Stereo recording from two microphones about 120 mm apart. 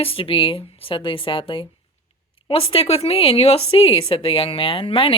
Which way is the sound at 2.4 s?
50° left (ahead or behind).